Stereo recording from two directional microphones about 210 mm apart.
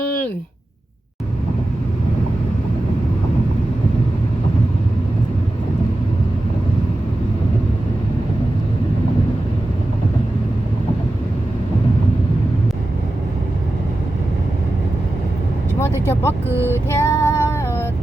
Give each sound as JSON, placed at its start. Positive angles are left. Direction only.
{"t": 15.8, "sound": "vehicle", "side_deg": 10}
{"t": 16.5, "sound": "child singing", "side_deg": -10}
{"t": 16.9, "sound": "female singing", "side_deg": 10}